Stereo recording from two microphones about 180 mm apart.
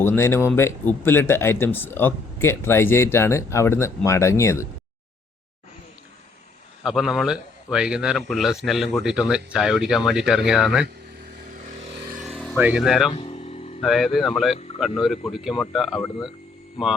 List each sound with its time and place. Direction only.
0.0 s speech: 15° left (ahead or behind)
6.8 s a man's voice: centre (ahead or behind)
12.1 s vehicle: centre (ahead or behind)
12.5 s a man's voice: 10° right (ahead or behind)
13.1 s a sound: 35° left (ahead or behind)
13.8 s a man's voice: centre (ahead or behind)